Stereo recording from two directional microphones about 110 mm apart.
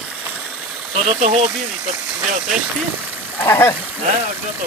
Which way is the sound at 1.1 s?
90° right.